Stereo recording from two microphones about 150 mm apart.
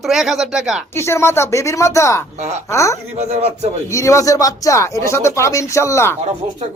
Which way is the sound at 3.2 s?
50° right (ahead or behind).